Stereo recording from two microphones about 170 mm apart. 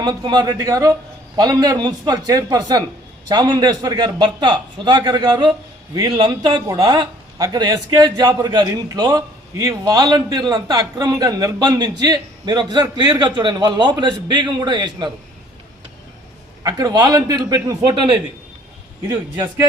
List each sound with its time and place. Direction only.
0.0 s a man's voice: 25° right (ahead or behind)
16.6 s a man's voice: 20° right (ahead or behind)